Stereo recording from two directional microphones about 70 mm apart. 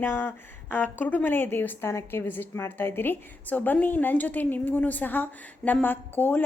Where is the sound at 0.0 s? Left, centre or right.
Left.